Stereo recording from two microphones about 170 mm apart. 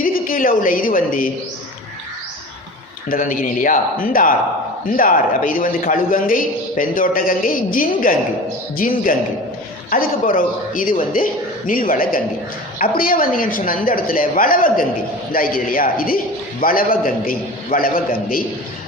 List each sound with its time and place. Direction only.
0.0 s a woman's voice: 55° left (ahead or behind)
3.1 s a man's voice: 55° left (ahead or behind)